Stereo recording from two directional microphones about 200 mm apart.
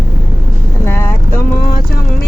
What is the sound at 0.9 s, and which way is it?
Speech, 10° left (ahead or behind).